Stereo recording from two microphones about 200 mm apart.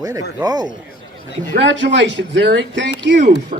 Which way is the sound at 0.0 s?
15° right (ahead or behind).